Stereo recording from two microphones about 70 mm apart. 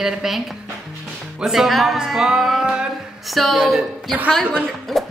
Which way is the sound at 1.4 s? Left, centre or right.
Centre.